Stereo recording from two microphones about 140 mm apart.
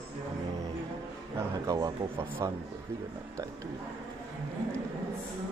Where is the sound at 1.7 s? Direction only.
25° right (ahead or behind).